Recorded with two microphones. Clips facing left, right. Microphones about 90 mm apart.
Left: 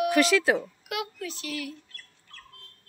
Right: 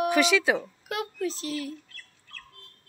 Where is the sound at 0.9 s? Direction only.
35° right (ahead or behind).